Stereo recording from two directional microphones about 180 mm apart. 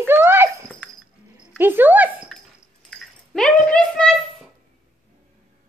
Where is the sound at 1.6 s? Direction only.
10° right (ahead or behind).